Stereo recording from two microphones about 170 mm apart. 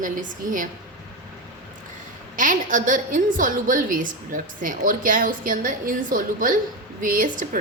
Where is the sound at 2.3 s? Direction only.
50° right (ahead or behind).